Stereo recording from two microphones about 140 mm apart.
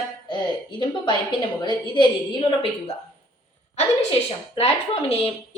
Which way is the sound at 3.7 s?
50° left (ahead or behind).